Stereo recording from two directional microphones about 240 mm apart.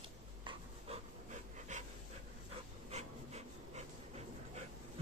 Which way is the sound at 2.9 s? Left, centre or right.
Right.